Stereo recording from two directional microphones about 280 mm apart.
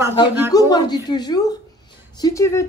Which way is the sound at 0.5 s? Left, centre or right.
Centre.